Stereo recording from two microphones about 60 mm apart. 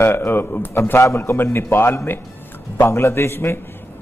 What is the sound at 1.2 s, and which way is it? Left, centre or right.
A man's voice, left.